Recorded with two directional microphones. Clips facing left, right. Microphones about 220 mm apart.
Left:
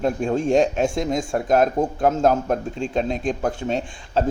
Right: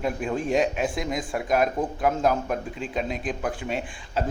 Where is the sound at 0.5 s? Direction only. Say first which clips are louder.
Left 4 dB; 45° left (ahead or behind).